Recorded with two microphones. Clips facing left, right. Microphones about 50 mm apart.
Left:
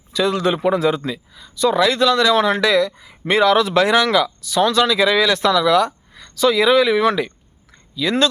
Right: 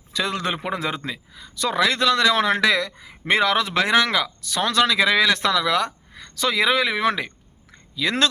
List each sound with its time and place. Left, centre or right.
0.1 s a man's voice: right
4.4 s speech: right
8.0 s speech: right